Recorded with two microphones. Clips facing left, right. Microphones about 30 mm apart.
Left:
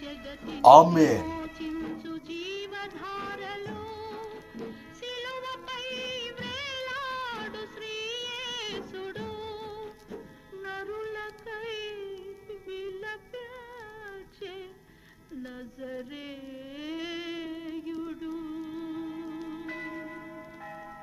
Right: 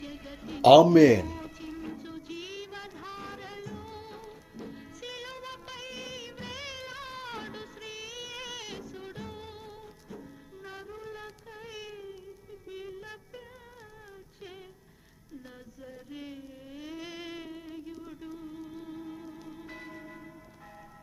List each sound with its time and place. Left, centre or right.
0.0 s music: centre
0.9 s speech: right
1.2 s music: centre
1.9 s music: centre
5.0 s music of bollywood: centre
8.8 s music: left
9.0 s music: centre
15.8 s a sound: left
17.1 s music: centre